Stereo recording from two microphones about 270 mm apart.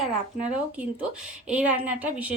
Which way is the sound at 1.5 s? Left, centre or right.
Centre.